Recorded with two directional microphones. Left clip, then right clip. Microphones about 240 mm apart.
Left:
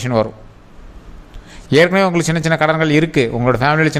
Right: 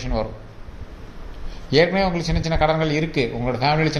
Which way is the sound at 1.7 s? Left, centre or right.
Left.